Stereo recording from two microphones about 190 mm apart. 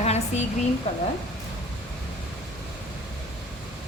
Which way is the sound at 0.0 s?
35° left (ahead or behind).